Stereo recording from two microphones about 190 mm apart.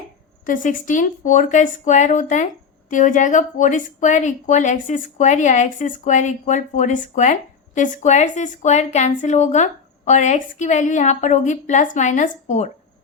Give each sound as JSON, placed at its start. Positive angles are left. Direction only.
{"t": 0.4, "sound": "speech", "side_deg": 45}